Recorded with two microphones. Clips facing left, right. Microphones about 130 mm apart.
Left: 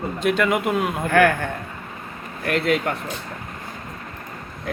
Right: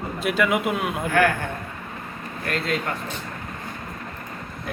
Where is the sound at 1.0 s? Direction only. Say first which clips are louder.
Left 3 dB; 55° left (ahead or behind).